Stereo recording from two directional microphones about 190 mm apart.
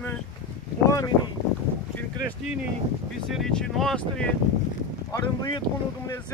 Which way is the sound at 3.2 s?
Centre (ahead or behind).